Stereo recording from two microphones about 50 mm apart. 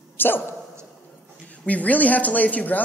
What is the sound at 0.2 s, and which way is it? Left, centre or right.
Speech, left.